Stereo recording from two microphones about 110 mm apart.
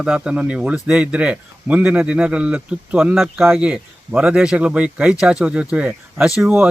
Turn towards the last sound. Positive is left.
turn(degrees=-5)  # may be behind; listen again after turning